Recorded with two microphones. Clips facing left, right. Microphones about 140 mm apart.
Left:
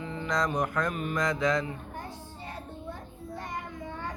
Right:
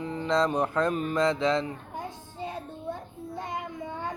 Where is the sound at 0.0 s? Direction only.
35° right (ahead or behind).